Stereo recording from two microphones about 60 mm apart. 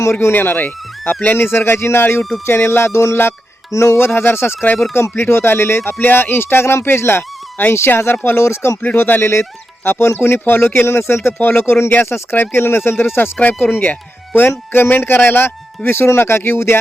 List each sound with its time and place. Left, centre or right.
0.0 s speech: left
3.7 s music: left
3.9 s speech: left
8.8 s speech: left
11.3 s speech: left